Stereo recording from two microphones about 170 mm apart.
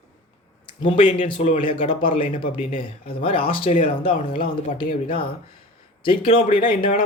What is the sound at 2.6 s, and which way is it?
Speech, 45° left (ahead or behind).